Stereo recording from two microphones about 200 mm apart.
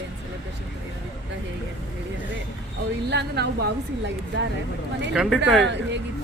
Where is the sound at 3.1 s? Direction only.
55° right (ahead or behind).